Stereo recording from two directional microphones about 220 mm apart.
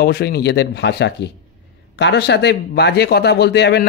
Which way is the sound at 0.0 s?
45° left (ahead or behind).